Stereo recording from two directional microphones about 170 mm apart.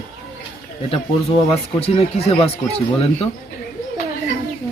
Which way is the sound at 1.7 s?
35° left (ahead or behind).